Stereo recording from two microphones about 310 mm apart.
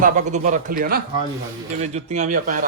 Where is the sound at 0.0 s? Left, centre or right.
Right.